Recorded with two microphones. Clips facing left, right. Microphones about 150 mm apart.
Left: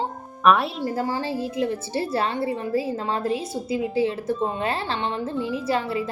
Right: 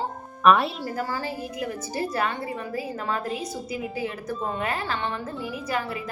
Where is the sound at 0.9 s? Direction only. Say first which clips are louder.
Left 4 dB; 25° left (ahead or behind).